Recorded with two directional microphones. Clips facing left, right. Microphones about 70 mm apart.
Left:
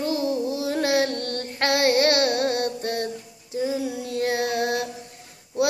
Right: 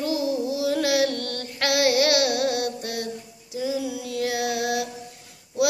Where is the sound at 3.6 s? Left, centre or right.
Left.